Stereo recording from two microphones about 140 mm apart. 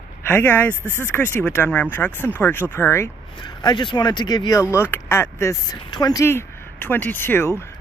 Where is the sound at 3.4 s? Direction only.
30° left (ahead or behind).